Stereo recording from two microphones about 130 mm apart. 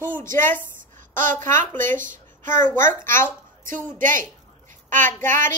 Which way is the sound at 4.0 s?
90° right.